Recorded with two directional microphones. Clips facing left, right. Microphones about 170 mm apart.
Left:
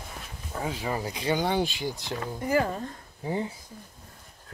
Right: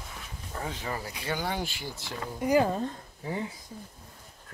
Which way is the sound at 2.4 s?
15° right (ahead or behind).